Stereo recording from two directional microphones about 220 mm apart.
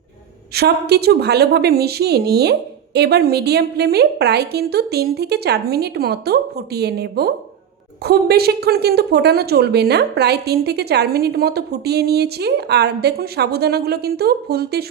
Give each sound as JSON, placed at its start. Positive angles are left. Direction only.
{"t": 0.5, "sound": "a woman's voice", "side_deg": -45}